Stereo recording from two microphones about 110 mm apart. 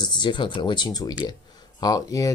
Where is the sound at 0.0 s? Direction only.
45° left (ahead or behind).